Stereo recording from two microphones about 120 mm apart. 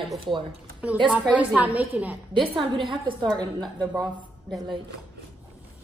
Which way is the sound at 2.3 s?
40° right (ahead or behind).